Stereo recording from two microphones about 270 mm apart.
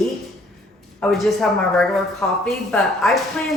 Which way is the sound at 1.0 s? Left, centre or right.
Centre.